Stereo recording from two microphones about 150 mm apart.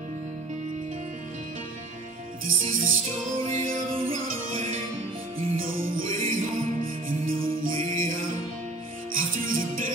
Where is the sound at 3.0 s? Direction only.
45° right (ahead or behind).